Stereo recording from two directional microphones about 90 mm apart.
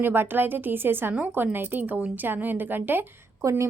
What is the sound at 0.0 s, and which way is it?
A woman's voice, 25° right (ahead or behind).